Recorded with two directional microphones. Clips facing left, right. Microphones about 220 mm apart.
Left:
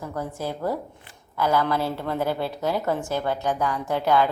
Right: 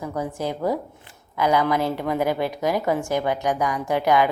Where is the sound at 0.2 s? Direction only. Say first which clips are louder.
Right 3 dB; 15° right (ahead or behind).